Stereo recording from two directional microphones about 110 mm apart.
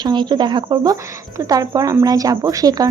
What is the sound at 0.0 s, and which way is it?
A woman's voice, 40° right (ahead or behind).